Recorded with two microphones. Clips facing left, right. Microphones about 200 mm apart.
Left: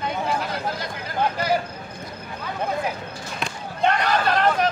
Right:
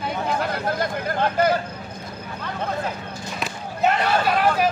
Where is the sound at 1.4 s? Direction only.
50° right (ahead or behind).